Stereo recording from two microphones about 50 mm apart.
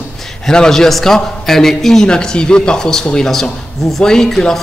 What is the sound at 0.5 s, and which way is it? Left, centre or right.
A woman's voice, centre.